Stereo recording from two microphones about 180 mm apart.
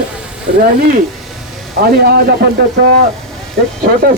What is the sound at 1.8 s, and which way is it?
Speech, 60° right (ahead or behind).